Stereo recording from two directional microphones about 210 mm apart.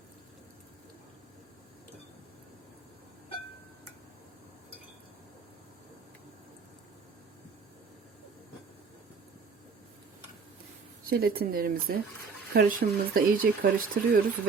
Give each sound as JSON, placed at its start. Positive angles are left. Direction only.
{"t": 11.1, "sound": "speech", "side_deg": -45}